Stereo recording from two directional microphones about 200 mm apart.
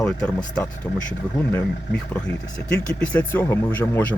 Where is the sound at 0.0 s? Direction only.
5° left (ahead or behind).